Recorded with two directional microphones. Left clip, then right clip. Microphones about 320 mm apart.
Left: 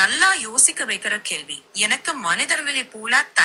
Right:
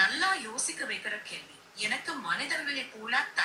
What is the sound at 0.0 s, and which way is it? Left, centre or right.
A woman's voice, left.